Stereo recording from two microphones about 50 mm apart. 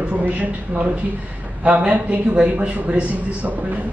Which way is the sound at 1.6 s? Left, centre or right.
Right.